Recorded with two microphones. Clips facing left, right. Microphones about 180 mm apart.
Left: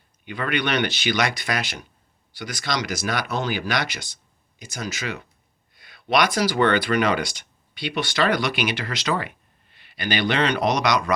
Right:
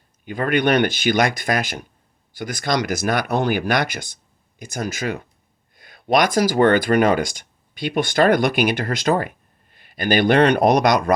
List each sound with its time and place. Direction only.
0.3 s speech: 45° right (ahead or behind)